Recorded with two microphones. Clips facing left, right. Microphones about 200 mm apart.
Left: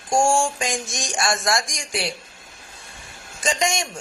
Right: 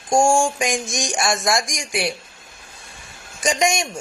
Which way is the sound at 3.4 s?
15° right (ahead or behind).